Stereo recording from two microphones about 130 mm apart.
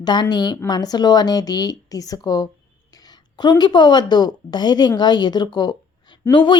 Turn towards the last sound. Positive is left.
turn(degrees=35)  # may be behind; listen again after turning